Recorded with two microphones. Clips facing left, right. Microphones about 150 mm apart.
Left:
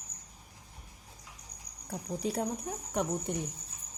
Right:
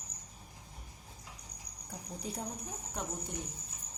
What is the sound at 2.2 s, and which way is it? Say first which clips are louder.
Speech: left 9 dB; 75° left (ahead or behind).